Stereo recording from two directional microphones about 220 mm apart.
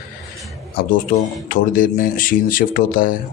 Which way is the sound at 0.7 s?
40° left (ahead or behind).